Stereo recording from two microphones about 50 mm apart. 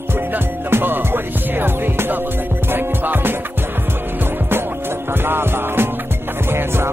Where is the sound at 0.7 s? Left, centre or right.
Right.